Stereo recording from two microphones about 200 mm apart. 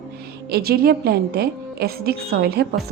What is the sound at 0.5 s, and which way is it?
A woman's voice, 50° right (ahead or behind).